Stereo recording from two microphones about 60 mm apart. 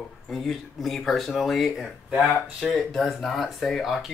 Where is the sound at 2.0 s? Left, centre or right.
Centre.